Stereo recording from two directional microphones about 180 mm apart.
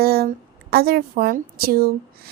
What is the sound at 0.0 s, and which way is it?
A woman's voice, 60° right (ahead or behind).